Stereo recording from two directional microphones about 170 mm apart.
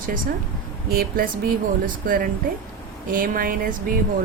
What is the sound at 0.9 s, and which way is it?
Speech, 60° right (ahead or behind).